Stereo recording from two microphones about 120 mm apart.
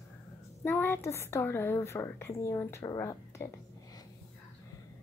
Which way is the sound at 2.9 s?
30° left (ahead or behind).